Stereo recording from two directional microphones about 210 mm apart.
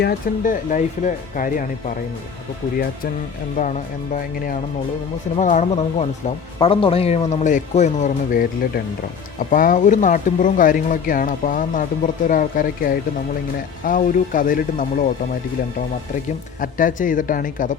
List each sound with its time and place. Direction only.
0.0 s speech: 45° left (ahead or behind)
3.6 s speech: 35° left (ahead or behind)
16.6 s speech: 40° left (ahead or behind)